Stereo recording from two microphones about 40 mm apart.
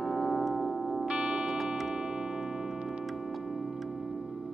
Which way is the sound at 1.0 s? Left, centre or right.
Right.